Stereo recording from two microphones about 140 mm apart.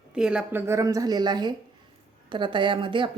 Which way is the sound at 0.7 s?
25° right (ahead or behind).